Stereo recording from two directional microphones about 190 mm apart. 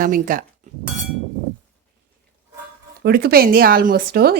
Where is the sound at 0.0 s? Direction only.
45° right (ahead or behind).